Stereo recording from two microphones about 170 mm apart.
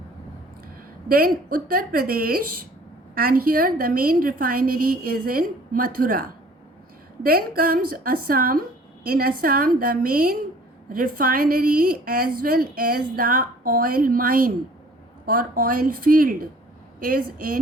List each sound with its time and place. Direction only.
1.0 s a woman's voice: 60° right (ahead or behind)